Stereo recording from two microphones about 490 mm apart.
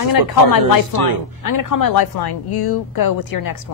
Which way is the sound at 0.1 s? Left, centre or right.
Left.